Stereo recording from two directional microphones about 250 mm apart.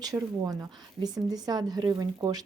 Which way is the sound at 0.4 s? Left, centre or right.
Centre.